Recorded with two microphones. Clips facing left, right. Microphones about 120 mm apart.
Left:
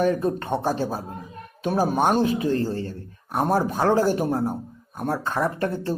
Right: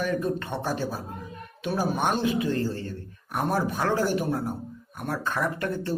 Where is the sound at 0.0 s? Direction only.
35° left (ahead or behind).